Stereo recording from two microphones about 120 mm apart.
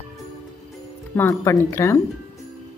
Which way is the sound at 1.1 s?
20° left (ahead or behind).